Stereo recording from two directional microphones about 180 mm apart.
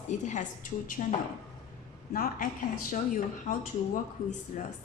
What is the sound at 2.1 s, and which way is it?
Speech, 55° left (ahead or behind).